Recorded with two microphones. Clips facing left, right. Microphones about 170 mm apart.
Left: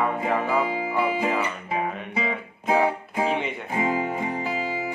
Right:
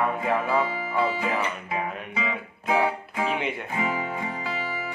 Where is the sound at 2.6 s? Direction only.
30° left (ahead or behind).